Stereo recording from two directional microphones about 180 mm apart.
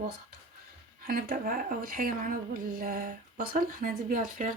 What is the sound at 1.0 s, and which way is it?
Speech, 55° right (ahead or behind).